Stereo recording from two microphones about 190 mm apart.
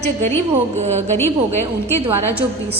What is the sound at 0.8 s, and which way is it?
Speech, 35° right (ahead or behind).